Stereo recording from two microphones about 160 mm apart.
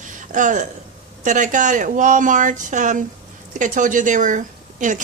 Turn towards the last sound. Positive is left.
turn(degrees=-50)  # may be behind; listen again after turning